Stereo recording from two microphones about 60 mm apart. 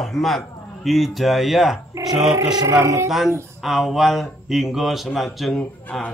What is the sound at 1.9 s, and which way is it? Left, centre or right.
Speech, right.